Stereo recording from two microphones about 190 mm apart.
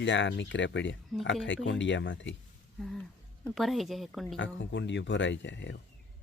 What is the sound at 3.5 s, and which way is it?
Speech, centre (ahead or behind).